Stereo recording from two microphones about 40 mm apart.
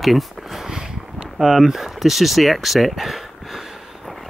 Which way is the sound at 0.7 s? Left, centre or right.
Centre.